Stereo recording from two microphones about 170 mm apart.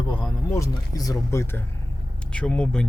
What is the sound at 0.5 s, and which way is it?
Speech, 20° left (ahead or behind).